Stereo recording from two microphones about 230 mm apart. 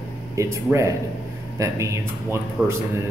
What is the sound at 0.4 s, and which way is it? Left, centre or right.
Speech, centre.